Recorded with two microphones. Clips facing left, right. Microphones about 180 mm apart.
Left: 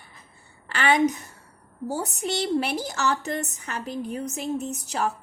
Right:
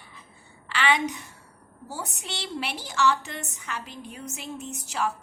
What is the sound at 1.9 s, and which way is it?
A woman's voice, 40° left (ahead or behind).